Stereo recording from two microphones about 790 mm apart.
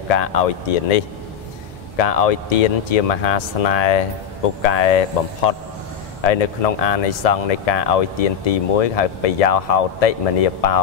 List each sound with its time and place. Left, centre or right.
0.1 s speech: left